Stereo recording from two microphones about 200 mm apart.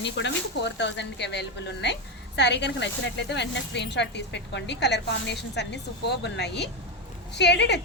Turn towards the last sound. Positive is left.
turn(degrees=60)  # may be behind; listen again after turning